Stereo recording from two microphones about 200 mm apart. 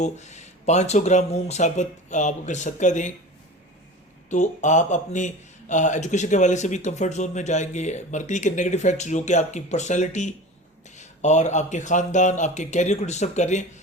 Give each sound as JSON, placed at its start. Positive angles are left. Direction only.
{"t": 0.0, "sound": "a man's voice", "side_deg": 35}
{"t": 4.3, "sound": "a man's voice", "side_deg": 35}